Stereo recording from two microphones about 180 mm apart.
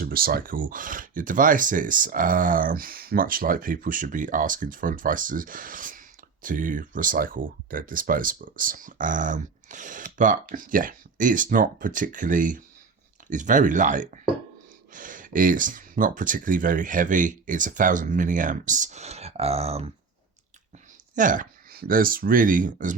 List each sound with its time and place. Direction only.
0.0 s speech: 55° right (ahead or behind); by 19.9 s 35° right (ahead or behind)
21.2 s speech: 45° right (ahead or behind)